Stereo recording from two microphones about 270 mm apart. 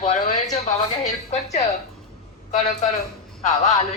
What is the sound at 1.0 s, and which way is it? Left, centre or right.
A woman's voice, left.